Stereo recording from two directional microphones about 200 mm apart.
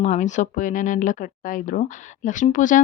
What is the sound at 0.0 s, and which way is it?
Speech, 35° left (ahead or behind).